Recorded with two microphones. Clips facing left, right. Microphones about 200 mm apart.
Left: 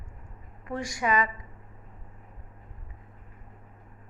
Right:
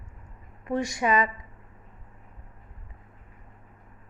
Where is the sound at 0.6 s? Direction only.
25° right (ahead or behind).